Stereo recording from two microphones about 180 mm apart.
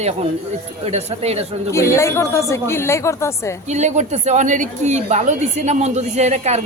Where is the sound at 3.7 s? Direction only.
40° right (ahead or behind).